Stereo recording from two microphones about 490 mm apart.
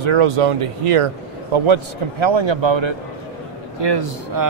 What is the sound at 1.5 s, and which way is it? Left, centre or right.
A man's voice, right.